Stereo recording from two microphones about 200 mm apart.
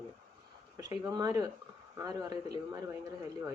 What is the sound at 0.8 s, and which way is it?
A woman's voice, 20° right (ahead or behind).